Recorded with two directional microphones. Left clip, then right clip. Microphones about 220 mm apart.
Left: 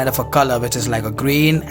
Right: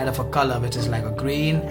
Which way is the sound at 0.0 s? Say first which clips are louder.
Left 6 dB; 40° left (ahead or behind).